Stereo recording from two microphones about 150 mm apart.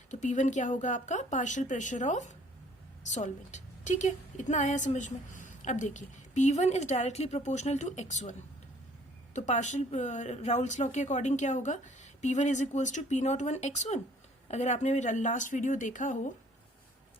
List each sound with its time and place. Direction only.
0.1 s a woman's voice: 55° left (ahead or behind)